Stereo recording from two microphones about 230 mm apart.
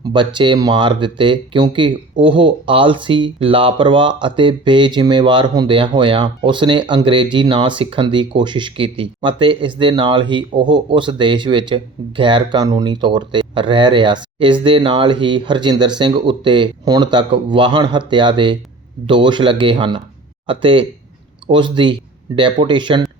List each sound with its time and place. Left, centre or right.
0.1 s speech: right